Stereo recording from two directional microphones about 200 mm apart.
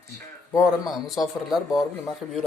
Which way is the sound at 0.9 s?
Centre (ahead or behind).